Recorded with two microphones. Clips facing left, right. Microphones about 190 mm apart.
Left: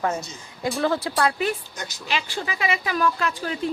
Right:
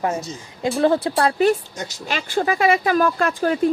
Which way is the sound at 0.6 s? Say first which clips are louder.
Right 6 dB; 30° right (ahead or behind).